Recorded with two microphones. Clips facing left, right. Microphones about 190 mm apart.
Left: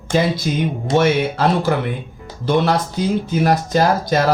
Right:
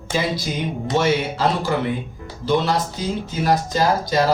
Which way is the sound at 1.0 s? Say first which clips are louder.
Left 3 dB; 55° left (ahead or behind).